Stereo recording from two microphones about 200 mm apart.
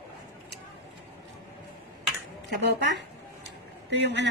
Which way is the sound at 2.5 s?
60° right (ahead or behind).